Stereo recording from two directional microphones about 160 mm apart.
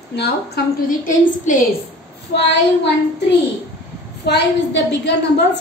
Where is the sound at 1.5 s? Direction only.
60° left (ahead or behind).